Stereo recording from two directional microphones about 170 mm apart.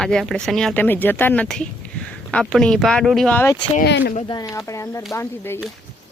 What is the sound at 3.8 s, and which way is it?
Speech, 75° left (ahead or behind).